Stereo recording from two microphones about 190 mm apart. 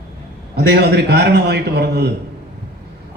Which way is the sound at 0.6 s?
55° right (ahead or behind).